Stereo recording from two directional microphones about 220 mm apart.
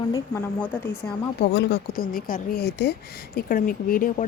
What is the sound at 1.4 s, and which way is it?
Speech, 50° left (ahead or behind).